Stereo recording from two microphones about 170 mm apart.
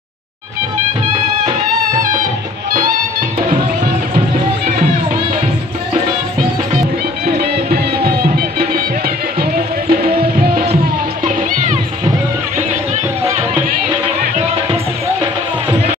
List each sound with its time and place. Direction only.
2.0 s music: 50° right (ahead or behind)
7.3 s music: 65° right (ahead or behind)
11.2 s music: 45° right (ahead or behind)